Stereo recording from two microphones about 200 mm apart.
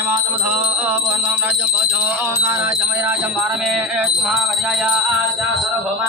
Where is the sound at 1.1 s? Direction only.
10° right (ahead or behind).